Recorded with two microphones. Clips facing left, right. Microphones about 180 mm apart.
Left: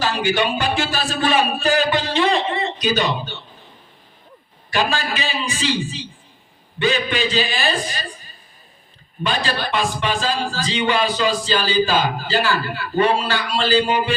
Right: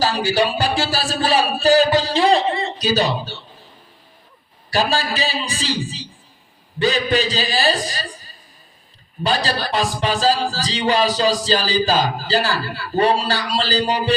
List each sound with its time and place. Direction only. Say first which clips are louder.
0.0 s a man's voice: right 2 dB; 35° right (ahead or behind)
4.7 s a man's voice: right 1 dB; 35° right (ahead or behind)
9.2 s a man's voice: right 2 dB; 35° right (ahead or behind)